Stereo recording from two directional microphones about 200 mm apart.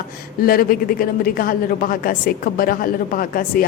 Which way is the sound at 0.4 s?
45° left (ahead or behind).